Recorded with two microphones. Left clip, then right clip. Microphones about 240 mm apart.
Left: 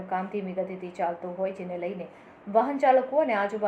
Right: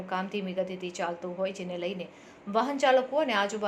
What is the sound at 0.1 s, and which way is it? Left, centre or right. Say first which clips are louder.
A woman's voice: left 2 dB; right.